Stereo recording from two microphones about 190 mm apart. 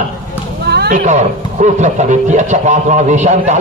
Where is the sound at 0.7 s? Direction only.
60° right (ahead or behind).